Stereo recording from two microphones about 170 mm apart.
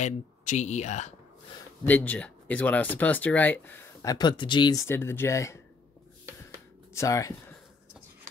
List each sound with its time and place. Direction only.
0.0 s speech: 45° left (ahead or behind)
1.9 s speech: 10° left (ahead or behind)
6.9 s speech: 20° left (ahead or behind)